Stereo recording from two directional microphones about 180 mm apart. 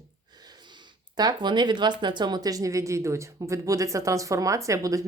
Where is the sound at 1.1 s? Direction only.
25° right (ahead or behind).